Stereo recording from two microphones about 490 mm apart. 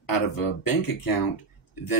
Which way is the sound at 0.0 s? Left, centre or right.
Left.